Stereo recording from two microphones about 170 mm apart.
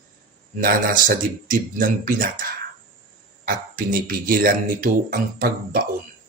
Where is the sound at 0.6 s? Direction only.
55° right (ahead or behind).